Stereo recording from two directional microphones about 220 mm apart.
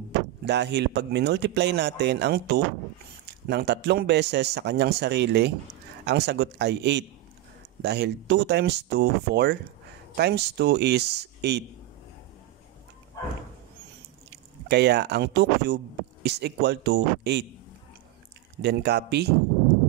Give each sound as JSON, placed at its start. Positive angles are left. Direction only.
{"t": 0.5, "sound": "speech", "side_deg": -50}
{"t": 14.7, "sound": "speech", "side_deg": -50}
{"t": 18.6, "sound": "speech", "side_deg": -50}